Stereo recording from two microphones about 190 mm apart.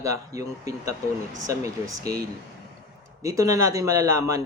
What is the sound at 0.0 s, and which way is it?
Speech, 15° right (ahead or behind).